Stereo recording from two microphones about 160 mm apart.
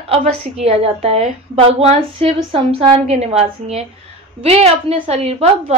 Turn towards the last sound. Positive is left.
turn(degrees=-40)  # may be behind; listen again after turning